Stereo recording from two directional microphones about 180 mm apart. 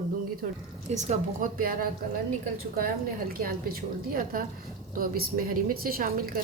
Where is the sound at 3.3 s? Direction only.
55° right (ahead or behind).